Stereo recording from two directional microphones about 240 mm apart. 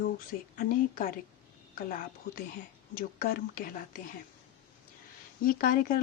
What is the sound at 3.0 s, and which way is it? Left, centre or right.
A woman's voice, left.